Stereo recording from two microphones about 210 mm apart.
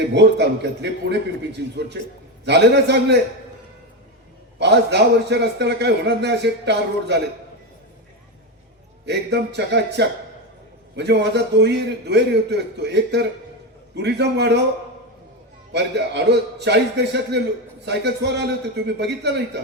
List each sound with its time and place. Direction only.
0.0 s a man's voice: 55° right (ahead or behind)
4.6 s a man's voice: 55° right (ahead or behind)
9.0 s a man's voice: 55° right (ahead or behind)
15.7 s a man's voice: 55° right (ahead or behind)